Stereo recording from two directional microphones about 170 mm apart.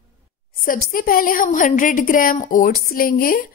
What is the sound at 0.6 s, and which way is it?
Speech, 60° left (ahead or behind).